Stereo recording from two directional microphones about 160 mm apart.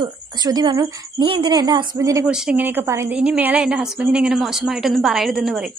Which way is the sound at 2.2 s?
5° right (ahead or behind).